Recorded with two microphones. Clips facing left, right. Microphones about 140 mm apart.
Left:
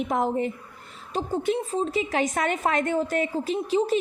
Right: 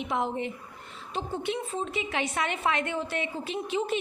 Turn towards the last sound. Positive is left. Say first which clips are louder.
# left 6 dB
turn(degrees=35)  # may be behind; listen again after turning